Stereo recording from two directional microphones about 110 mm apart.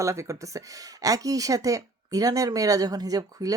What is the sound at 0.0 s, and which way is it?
Speech, 25° right (ahead or behind).